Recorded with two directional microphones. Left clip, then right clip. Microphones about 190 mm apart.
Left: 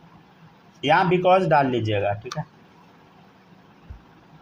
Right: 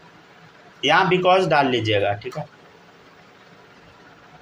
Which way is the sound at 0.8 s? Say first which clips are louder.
Right 2 dB; 25° left (ahead or behind).